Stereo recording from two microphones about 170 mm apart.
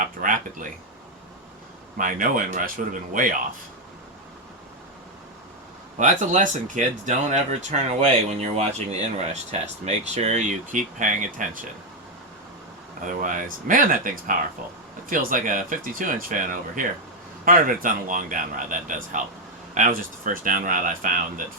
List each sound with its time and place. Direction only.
0.0 s a sound: 50° right (ahead or behind)
2.0 s speech: 55° right (ahead or behind)
6.0 s speech: 45° right (ahead or behind)
13.1 s speech: 50° right (ahead or behind)